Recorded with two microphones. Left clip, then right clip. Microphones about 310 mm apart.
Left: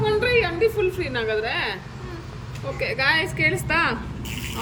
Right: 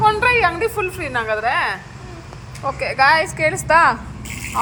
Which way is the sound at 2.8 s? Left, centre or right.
Centre.